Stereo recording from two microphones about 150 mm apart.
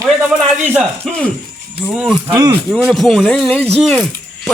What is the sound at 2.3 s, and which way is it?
Speech, 30° right (ahead or behind).